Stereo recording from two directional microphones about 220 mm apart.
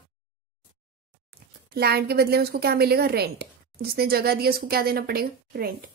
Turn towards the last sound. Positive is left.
turn(degrees=-45)  # may be behind; listen again after turning